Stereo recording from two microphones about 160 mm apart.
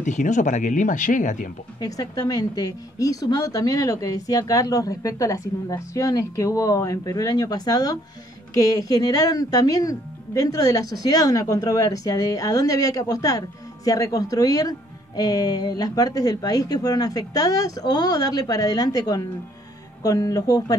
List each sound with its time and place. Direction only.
0.0 s speech: 50° left (ahead or behind)
1.8 s speech: 20° left (ahead or behind)